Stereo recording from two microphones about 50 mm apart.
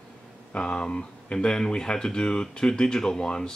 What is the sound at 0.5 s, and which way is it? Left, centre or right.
Speech, centre.